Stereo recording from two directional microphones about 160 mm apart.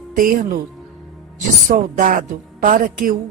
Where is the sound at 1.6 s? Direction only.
55° right (ahead or behind).